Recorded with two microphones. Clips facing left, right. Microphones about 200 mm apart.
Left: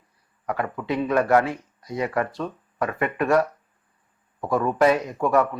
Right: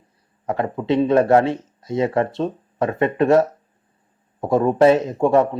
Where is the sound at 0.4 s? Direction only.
25° right (ahead or behind).